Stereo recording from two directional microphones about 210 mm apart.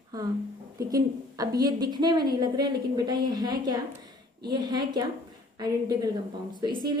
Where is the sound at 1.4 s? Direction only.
15° right (ahead or behind).